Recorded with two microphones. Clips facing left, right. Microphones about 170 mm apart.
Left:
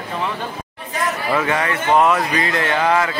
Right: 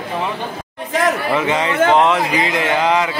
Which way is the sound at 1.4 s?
20° right (ahead or behind).